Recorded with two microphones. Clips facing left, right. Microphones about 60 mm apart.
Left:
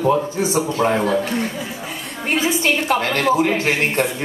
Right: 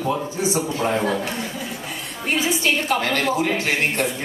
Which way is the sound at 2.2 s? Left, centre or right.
Left.